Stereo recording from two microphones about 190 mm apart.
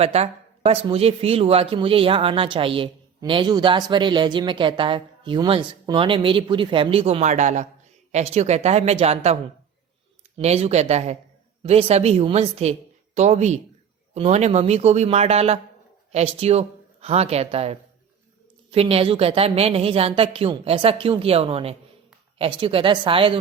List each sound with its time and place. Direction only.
0.0 s speech: 35° right (ahead or behind)